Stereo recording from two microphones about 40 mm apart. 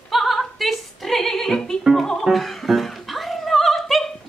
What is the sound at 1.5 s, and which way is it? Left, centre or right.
Music, centre.